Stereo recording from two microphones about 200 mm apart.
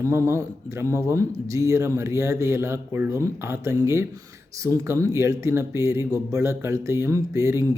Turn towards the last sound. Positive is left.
turn(degrees=-15)  # may be behind; listen again after turning